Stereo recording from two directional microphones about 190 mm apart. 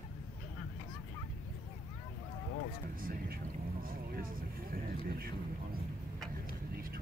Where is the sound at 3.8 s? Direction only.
50° right (ahead or behind).